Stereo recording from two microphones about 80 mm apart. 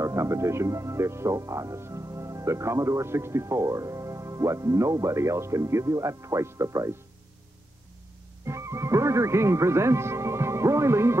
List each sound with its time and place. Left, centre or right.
0.0 s speech: right
8.5 s speech: right